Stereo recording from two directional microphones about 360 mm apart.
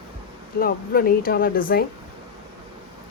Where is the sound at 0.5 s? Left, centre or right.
Left.